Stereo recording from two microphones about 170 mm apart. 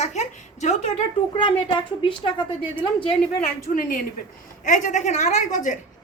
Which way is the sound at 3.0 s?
45° left (ahead or behind).